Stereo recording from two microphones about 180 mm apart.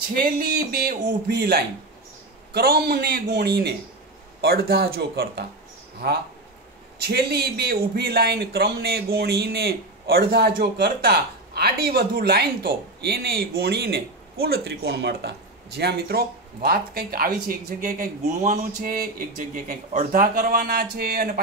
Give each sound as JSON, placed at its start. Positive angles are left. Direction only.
{"t": 0.1, "sound": "speech", "side_deg": -60}